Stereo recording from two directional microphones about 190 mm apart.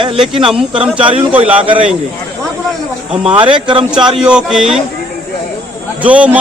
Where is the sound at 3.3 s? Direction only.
25° right (ahead or behind).